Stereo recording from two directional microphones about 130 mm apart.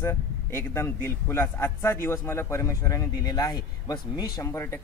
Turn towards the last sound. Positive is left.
turn(degrees=20)  # may be behind; listen again after turning